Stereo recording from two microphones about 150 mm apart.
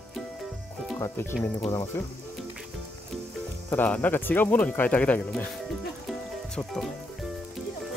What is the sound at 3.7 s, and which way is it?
Speech, 10° left (ahead or behind).